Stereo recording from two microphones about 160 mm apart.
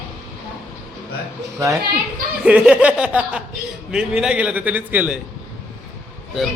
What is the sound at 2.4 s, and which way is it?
A man's voice, 5° right (ahead or behind).